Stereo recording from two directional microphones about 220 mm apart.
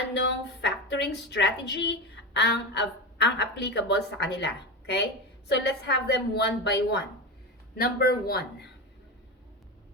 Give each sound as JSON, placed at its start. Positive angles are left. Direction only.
{"t": 0.2, "sound": "a woman's voice", "side_deg": 50}